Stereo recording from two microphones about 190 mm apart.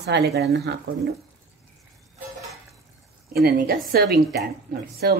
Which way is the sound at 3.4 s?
55° right (ahead or behind).